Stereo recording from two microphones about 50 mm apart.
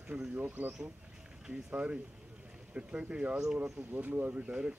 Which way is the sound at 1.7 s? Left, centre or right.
Right.